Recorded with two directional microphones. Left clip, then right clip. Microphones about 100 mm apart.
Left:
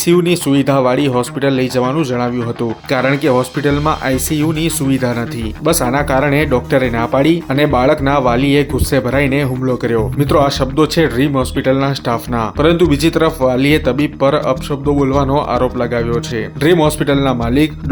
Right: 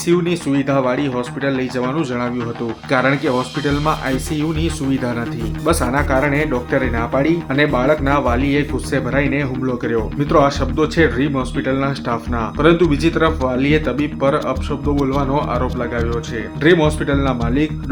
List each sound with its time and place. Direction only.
0.0 s speech: 35° left (ahead or behind)
1.9 s speech: 20° left (ahead or behind); by 17.7 s 40° left (ahead or behind)